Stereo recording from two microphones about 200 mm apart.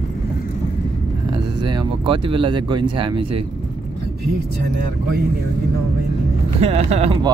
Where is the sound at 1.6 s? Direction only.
20° right (ahead or behind).